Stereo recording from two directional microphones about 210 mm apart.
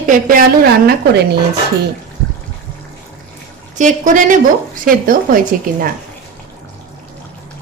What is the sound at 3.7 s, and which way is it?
A woman's voice, 35° right (ahead or behind).